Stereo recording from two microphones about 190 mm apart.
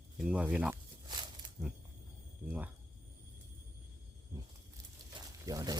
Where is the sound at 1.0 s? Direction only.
25° right (ahead or behind).